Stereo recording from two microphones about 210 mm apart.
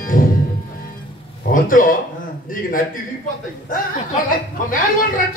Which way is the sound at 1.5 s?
40° left (ahead or behind).